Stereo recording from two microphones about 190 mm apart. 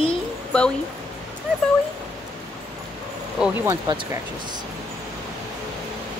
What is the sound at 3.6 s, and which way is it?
Speech, 15° right (ahead or behind).